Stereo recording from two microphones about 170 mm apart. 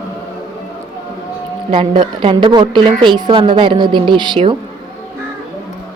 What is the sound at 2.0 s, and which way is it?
A woman's voice, 30° right (ahead or behind).